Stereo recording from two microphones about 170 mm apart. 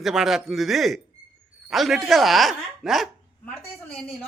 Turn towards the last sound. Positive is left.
turn(degrees=0)  # may be behind; listen again after turning